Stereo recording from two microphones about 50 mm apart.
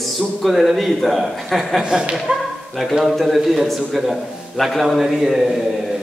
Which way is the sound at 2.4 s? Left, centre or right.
Centre.